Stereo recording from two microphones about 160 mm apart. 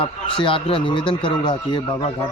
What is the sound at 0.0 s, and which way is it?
A man's voice, 35° left (ahead or behind).